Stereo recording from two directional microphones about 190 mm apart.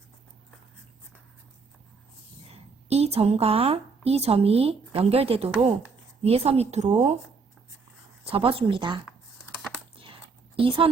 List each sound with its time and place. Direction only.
2.5 s a woman's voice: 35° right (ahead or behind)
8.2 s speech: 30° right (ahead or behind)
10.6 s speech: 30° right (ahead or behind)